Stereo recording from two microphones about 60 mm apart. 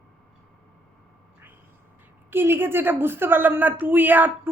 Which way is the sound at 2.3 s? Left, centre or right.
Right.